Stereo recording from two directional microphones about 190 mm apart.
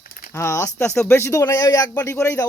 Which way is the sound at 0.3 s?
15° left (ahead or behind).